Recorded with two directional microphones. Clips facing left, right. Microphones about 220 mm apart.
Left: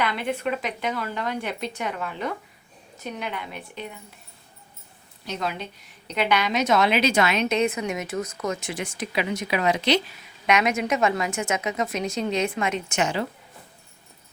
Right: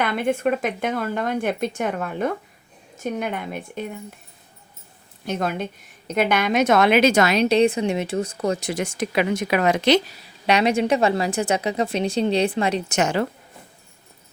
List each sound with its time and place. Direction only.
0.0 s speech: 50° right (ahead or behind)
5.2 s a woman's voice: 50° right (ahead or behind)